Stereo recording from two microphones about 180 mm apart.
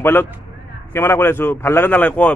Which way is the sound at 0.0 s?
10° left (ahead or behind).